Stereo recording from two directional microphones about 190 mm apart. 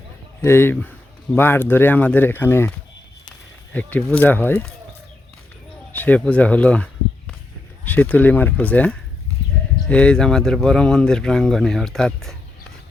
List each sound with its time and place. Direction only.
0.4 s speech: 10° left (ahead or behind)
5.9 s speech: 10° left (ahead or behind)